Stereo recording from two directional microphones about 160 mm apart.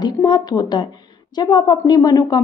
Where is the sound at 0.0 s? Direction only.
30° left (ahead or behind).